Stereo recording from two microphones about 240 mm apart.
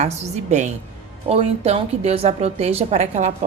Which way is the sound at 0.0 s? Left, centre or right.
Right.